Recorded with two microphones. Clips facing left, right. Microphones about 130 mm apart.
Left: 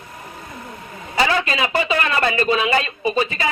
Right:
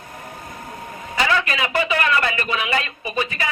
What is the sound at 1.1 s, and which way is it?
A man's voice, 35° left (ahead or behind).